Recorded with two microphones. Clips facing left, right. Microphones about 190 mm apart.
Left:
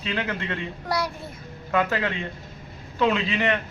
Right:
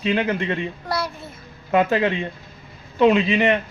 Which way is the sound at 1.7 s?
20° right (ahead or behind).